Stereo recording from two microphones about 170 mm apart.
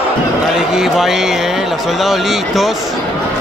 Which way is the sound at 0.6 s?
5° right (ahead or behind).